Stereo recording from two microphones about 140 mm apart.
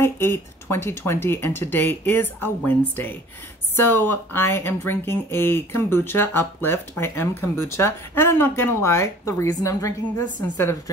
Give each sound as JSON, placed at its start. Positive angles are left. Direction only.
{"t": 0.0, "sound": "speech", "side_deg": 20}